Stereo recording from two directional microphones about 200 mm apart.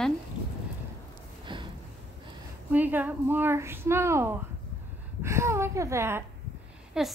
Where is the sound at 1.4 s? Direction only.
25° right (ahead or behind).